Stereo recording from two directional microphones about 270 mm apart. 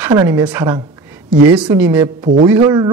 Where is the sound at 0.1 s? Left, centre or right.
Centre.